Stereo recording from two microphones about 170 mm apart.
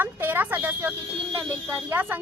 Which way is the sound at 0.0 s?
10° right (ahead or behind).